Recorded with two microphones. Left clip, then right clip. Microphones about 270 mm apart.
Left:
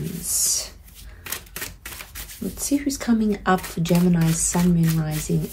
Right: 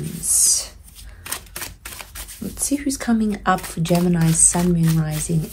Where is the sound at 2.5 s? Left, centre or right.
Right.